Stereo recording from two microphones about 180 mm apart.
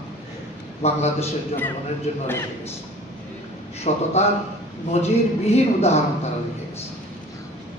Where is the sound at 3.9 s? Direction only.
40° left (ahead or behind).